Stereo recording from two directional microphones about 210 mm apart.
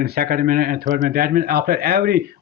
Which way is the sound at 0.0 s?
45° right (ahead or behind).